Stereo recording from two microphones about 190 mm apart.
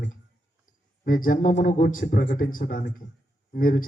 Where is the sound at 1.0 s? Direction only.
45° left (ahead or behind).